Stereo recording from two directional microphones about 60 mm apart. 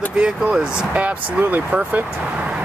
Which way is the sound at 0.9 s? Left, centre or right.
Right.